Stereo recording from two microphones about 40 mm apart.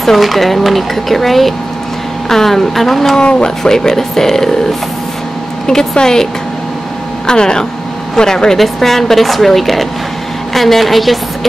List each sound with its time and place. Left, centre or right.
0.0 s speech: centre
3.2 s speech: left
3.4 s speech: centre
5.7 s speech: centre
7.2 s speech: centre
8.5 s speech: centre